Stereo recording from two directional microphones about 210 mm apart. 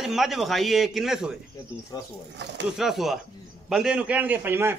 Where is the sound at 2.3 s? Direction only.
55° right (ahead or behind).